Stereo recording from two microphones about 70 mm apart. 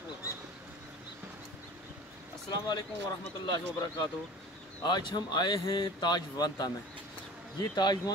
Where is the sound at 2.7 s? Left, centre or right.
Left.